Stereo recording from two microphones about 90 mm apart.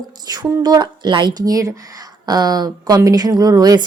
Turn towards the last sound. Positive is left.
turn(degrees=-45)  # may be behind; listen again after turning